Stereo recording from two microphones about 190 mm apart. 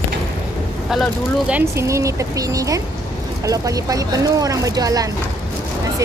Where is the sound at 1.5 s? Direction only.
10° right (ahead or behind).